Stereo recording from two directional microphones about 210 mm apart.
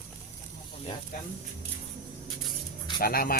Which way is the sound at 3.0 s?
45° left (ahead or behind).